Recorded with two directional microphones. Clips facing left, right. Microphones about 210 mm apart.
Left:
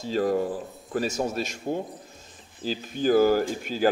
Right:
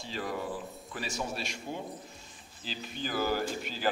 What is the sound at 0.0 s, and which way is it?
Speech, 45° left (ahead or behind).